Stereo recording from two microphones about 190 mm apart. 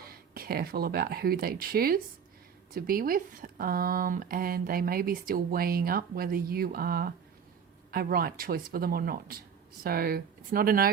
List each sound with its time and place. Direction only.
0.1 s speech: 55° right (ahead or behind)